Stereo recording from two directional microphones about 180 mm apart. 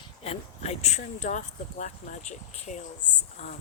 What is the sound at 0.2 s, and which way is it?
Speech, 35° left (ahead or behind).